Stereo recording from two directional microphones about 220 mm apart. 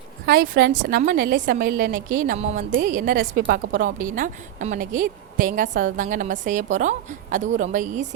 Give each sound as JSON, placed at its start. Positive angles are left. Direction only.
{"t": 0.3, "sound": "a woman's voice", "side_deg": -45}